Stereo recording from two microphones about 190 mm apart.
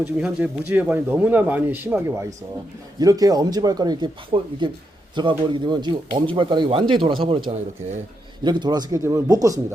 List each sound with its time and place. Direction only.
0.0 s speech: 5° right (ahead or behind)